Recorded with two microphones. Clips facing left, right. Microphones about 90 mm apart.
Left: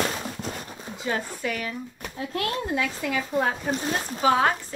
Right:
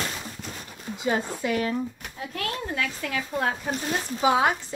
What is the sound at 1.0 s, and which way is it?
Speech, 20° right (ahead or behind).